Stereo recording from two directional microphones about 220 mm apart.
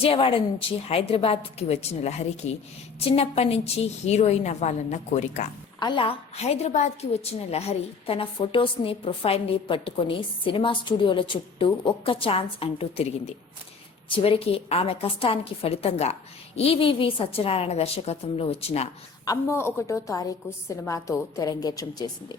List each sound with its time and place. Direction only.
0.0 s a woman's voice: 25° left (ahead or behind)
19.2 s a woman's voice: 15° left (ahead or behind)